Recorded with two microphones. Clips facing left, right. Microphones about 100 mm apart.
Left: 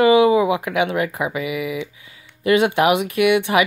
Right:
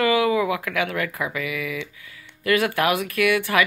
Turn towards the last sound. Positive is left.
turn(degrees=20)  # may be behind; listen again after turning